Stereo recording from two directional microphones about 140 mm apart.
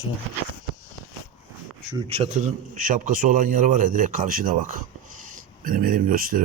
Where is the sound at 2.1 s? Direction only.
55° right (ahead or behind).